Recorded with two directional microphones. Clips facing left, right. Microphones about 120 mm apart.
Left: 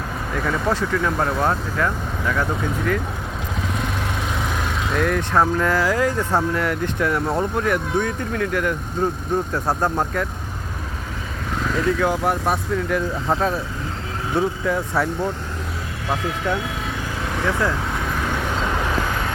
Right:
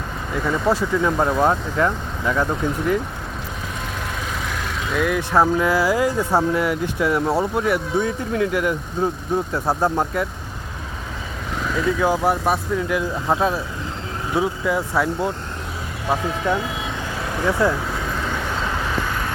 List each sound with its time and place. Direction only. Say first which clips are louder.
0.3 s speech: right 2 dB; 10° right (ahead or behind)
4.9 s speech: right 1 dB; 5° right (ahead or behind)
11.9 s speech: right 2 dB; 15° right (ahead or behind)
16.4 s speech: right 3 dB; 15° right (ahead or behind)